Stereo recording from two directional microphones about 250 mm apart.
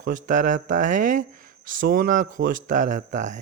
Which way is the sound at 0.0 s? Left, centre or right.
Right.